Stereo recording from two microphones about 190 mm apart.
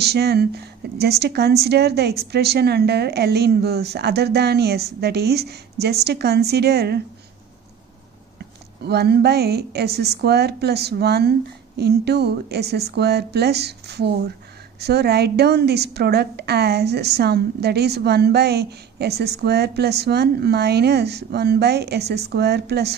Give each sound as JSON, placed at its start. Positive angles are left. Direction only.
{"t": 0.0, "sound": "a woman's voice", "side_deg": -60}
{"t": 8.4, "sound": "a woman's voice", "side_deg": -60}